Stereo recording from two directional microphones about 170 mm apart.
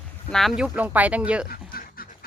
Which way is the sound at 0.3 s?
Centre (ahead or behind).